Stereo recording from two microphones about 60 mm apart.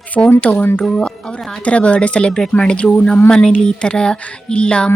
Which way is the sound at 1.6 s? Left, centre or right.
Centre.